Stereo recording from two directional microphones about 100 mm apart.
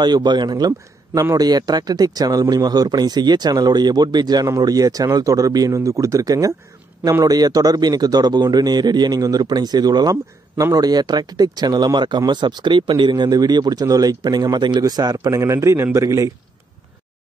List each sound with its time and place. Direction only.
0.0 s speech: 45° right (ahead or behind)
15.2 s speech: 30° right (ahead or behind)